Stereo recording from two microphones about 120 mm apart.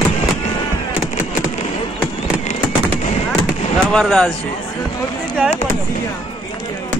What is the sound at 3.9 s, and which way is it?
Speech, centre (ahead or behind).